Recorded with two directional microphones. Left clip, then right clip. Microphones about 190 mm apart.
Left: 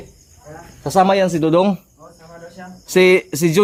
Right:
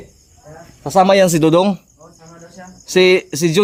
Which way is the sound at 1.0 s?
60° right (ahead or behind).